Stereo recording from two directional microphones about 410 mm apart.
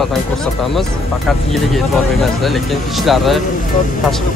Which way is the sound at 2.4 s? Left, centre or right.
Centre.